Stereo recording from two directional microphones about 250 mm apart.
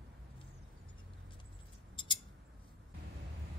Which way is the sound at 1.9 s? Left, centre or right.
Centre.